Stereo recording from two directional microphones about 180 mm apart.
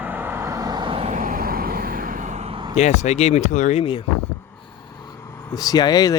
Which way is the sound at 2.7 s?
40° left (ahead or behind).